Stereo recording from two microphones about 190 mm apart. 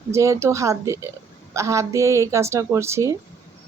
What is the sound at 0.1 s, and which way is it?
Speech, 15° right (ahead or behind).